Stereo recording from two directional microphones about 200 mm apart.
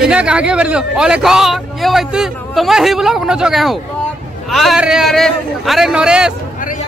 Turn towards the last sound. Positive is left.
turn(degrees=-5)  # may be behind; listen again after turning